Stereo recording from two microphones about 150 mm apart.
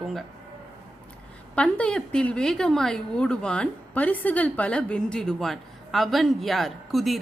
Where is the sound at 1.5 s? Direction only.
5° left (ahead or behind).